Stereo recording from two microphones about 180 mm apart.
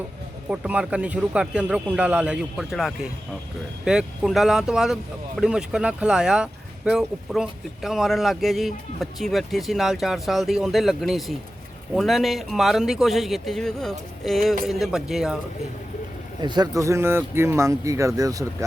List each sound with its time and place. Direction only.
0.5 s speech: 5° right (ahead or behind)
16.4 s speech: 25° right (ahead or behind)